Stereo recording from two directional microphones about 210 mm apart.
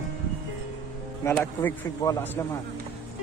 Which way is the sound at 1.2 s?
10° left (ahead or behind).